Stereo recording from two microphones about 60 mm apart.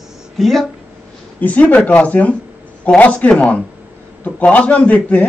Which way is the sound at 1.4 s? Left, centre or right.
Left.